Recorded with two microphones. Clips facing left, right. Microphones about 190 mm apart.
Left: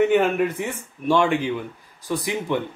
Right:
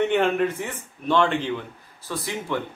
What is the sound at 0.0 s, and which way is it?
Speech, 5° left (ahead or behind).